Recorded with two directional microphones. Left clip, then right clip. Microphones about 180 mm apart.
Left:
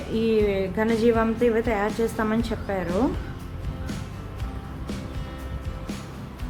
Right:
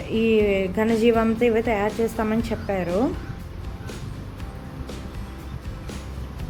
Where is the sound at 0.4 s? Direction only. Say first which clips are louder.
Right 2 dB; 10° right (ahead or behind).